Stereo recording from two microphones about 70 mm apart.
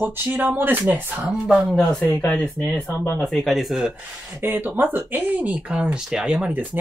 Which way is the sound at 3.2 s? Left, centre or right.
Centre.